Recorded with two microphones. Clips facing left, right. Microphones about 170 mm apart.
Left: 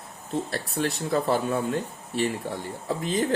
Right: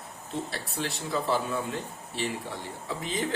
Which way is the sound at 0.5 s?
50° left (ahead or behind).